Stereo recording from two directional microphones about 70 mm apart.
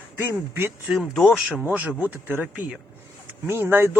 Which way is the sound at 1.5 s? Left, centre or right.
Right.